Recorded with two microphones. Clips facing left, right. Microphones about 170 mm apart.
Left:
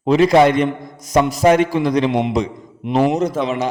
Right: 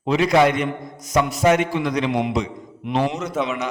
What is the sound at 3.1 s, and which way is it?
Speech, 35° left (ahead or behind).